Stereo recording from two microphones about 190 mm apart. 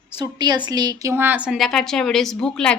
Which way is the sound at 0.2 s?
20° right (ahead or behind).